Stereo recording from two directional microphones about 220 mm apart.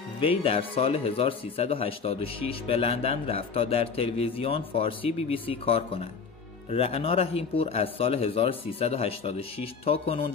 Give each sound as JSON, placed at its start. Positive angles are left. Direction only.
{"t": 0.2, "sound": "speech", "side_deg": 25}